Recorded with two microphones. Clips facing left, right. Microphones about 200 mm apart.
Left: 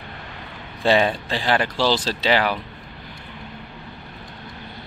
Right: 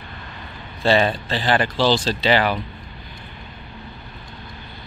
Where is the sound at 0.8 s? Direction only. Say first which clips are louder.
Even; 10° left (ahead or behind).